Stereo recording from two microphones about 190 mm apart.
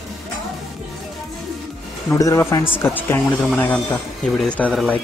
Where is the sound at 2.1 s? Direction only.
15° left (ahead or behind).